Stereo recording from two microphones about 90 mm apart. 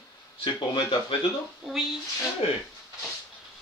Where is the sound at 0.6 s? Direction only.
65° left (ahead or behind).